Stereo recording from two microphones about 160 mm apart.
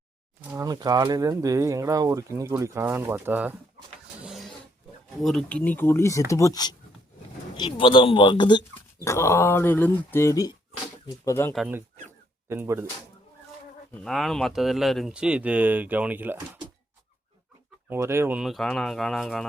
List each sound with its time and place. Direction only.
0.5 s speech: 25° right (ahead or behind)
4.2 s a sound: centre (ahead or behind)
5.2 s speech: centre (ahead or behind); by 8.6 s 30° left (ahead or behind)
9.0 s speech: 15° left (ahead or behind)
12.5 s speech: 15° right (ahead or behind)
13.9 s speech: centre (ahead or behind)
17.8 s speech: 15° right (ahead or behind); by 19.5 s centre (ahead or behind)